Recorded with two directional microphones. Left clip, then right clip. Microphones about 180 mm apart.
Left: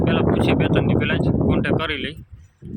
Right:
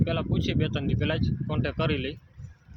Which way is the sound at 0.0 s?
5° right (ahead or behind).